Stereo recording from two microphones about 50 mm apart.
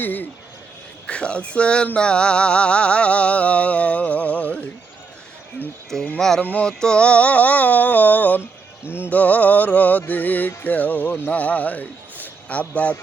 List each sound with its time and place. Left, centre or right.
0.0 s music: left
1.0 s music: left
6.1 s speech: centre
6.4 s music: left
6.7 s music: centre